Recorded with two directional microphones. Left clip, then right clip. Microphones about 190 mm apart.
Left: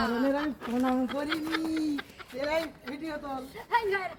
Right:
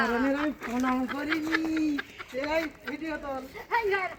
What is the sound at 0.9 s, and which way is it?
Speech, 20° left (ahead or behind).